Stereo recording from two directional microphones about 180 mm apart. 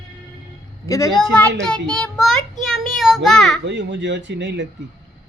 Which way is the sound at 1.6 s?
5° left (ahead or behind).